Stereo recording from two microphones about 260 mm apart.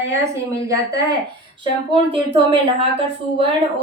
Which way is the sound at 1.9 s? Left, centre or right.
Centre.